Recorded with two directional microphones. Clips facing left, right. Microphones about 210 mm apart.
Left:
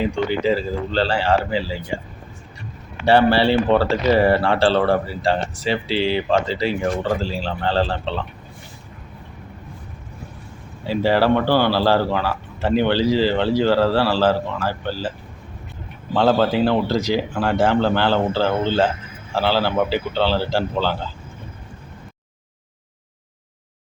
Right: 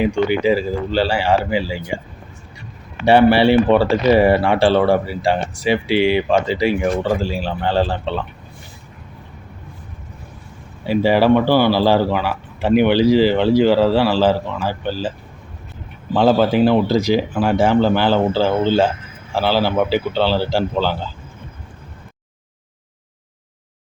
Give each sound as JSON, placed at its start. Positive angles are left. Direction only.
{"t": 0.0, "sound": "speech", "side_deg": -15}
{"t": 3.1, "sound": "speech", "side_deg": -15}
{"t": 10.8, "sound": "speech", "side_deg": -15}
{"t": 16.1, "sound": "speech", "side_deg": -15}